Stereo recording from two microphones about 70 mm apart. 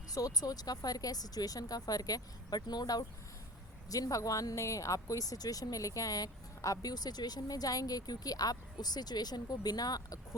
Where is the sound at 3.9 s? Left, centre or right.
Left.